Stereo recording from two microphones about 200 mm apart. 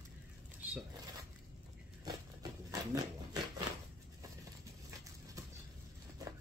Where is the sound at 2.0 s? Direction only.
20° right (ahead or behind).